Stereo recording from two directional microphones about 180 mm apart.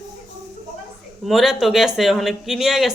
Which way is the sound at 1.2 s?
Centre (ahead or behind).